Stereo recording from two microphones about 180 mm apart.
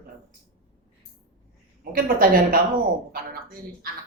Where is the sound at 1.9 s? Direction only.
55° right (ahead or behind).